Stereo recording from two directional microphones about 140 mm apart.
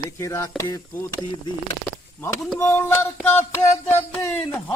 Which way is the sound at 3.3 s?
15° left (ahead or behind).